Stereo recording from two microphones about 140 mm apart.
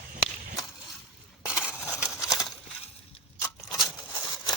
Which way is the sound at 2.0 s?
5° right (ahead or behind).